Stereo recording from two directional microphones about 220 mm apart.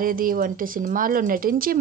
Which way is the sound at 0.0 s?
40° right (ahead or behind).